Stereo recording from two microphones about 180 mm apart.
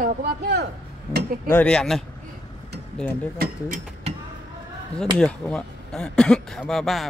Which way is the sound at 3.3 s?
55° right (ahead or behind).